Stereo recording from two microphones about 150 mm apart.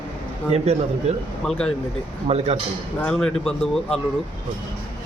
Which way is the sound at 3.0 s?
5° left (ahead or behind).